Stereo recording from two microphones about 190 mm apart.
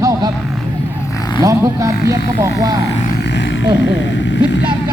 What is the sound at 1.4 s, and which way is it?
Speech, 15° right (ahead or behind).